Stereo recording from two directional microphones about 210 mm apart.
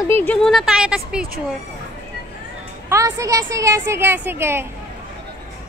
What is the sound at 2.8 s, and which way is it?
A woman's voice, 15° right (ahead or behind).